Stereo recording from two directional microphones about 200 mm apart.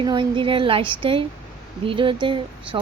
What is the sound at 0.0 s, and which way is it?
Speech, 20° right (ahead or behind).